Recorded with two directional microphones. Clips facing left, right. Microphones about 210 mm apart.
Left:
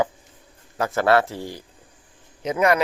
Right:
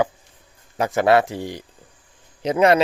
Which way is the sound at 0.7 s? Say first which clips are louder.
Right 2 dB; 20° right (ahead or behind).